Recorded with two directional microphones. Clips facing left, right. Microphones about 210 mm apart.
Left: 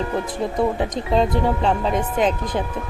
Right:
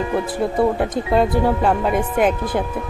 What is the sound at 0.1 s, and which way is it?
Music, 5° right (ahead or behind).